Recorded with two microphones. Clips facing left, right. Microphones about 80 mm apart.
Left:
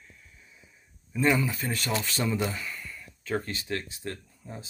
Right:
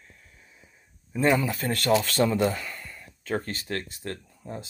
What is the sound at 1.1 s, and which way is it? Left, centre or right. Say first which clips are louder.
Speech: right 2 dB; right.